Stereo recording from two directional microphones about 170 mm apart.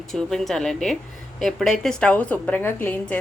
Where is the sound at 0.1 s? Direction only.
Centre (ahead or behind).